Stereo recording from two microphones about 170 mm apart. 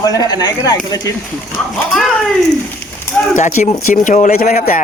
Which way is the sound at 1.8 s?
Centre (ahead or behind).